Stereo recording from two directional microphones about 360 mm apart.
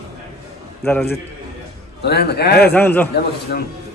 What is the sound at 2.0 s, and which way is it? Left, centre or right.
Speech, left.